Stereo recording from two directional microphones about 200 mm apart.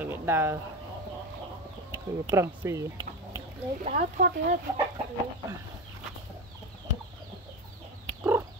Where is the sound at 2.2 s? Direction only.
10° right (ahead or behind).